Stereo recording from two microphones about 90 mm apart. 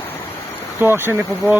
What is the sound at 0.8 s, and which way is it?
Speech, 25° right (ahead or behind).